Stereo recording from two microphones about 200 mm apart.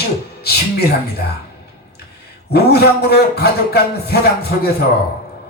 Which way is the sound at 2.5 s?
55° left (ahead or behind).